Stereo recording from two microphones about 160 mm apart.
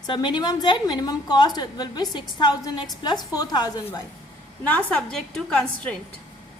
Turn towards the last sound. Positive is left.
turn(degrees=5)  # may be behind; listen again after turning